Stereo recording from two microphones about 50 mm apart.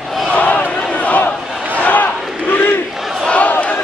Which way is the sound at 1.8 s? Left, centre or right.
Left.